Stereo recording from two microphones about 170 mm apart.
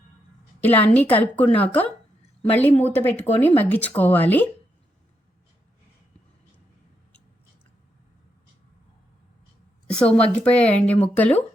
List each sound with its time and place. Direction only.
0.6 s speech: 10° left (ahead or behind)
9.9 s a woman's voice: 5° left (ahead or behind)